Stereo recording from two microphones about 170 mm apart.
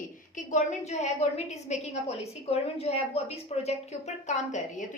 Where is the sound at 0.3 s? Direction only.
45° left (ahead or behind).